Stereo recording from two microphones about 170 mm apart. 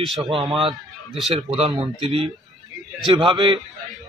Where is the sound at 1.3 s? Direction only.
35° right (ahead or behind).